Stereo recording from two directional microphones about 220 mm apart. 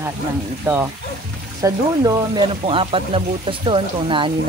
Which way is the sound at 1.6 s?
20° right (ahead or behind).